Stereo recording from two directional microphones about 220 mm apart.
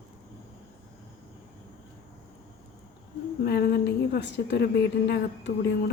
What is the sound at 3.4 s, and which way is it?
A woman's voice, 50° left (ahead or behind).